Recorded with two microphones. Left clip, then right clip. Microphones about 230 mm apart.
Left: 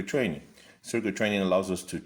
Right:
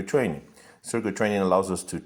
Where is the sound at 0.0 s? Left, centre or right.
Centre.